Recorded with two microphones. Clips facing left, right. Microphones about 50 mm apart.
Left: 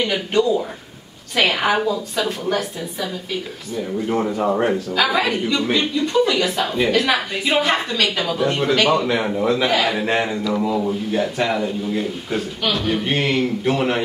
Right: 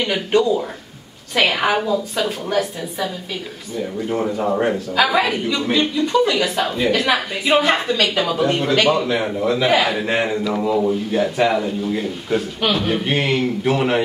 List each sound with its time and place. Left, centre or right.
0.0 s speech: centre
4.1 s speech: centre